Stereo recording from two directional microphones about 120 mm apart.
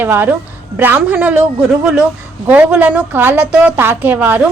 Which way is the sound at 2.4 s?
10° right (ahead or behind).